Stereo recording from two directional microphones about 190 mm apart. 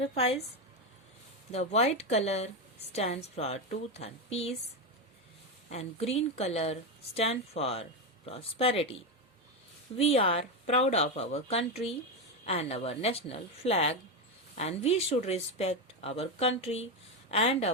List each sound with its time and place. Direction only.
0.0 s a woman's voice: 30° left (ahead or behind)
1.5 s a woman's voice: 35° left (ahead or behind)
5.7 s a woman's voice: 35° left (ahead or behind)
10.0 s a woman's voice: 30° left (ahead or behind)